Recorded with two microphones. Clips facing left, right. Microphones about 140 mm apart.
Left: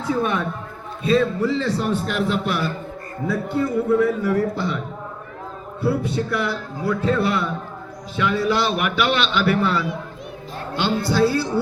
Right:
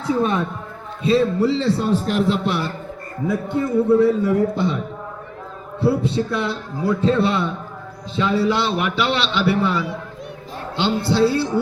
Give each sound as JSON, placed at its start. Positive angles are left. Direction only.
{"t": 0.2, "sound": "a man's voice", "side_deg": -25}
{"t": 5.8, "sound": "a man's voice", "side_deg": -25}